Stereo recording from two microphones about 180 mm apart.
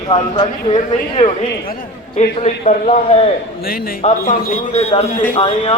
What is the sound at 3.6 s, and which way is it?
Speech, 55° left (ahead or behind).